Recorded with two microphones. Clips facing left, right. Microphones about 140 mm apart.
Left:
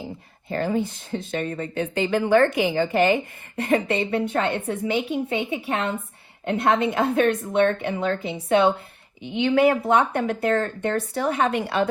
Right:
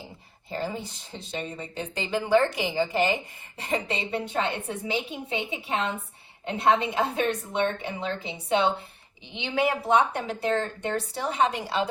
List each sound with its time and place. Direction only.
0.0 s speech: 55° left (ahead or behind)